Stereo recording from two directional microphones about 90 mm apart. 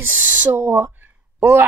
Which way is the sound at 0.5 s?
30° right (ahead or behind).